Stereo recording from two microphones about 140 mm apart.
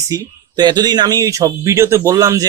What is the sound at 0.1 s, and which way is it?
Speech, 30° right (ahead or behind).